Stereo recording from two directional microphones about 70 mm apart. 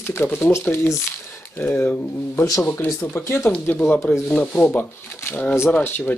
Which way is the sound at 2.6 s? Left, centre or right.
Left.